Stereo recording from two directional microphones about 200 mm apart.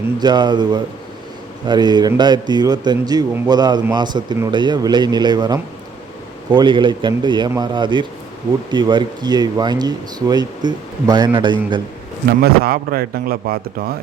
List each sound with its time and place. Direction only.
0.2 s speech: 20° right (ahead or behind)
12.4 s a man's voice: 50° right (ahead or behind)